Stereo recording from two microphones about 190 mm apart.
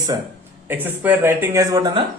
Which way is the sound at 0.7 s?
10° right (ahead or behind).